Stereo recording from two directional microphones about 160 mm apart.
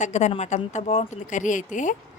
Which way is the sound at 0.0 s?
45° left (ahead or behind).